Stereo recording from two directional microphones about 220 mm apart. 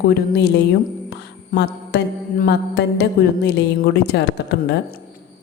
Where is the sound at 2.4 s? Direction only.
50° left (ahead or behind).